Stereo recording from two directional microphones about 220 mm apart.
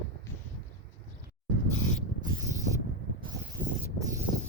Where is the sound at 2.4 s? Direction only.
15° right (ahead or behind).